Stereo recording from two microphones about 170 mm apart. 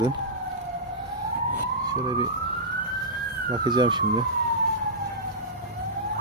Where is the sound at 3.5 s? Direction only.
25° right (ahead or behind).